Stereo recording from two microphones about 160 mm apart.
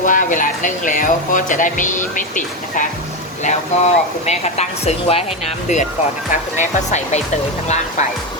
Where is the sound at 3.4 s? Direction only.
45° left (ahead or behind).